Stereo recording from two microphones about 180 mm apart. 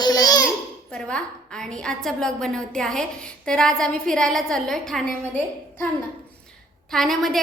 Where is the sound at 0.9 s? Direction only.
5° left (ahead or behind).